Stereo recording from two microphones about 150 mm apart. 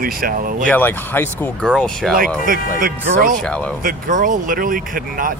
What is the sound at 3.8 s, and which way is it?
Speech, 60° right (ahead or behind).